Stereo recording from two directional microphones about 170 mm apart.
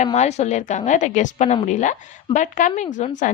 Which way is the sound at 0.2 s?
40° left (ahead or behind).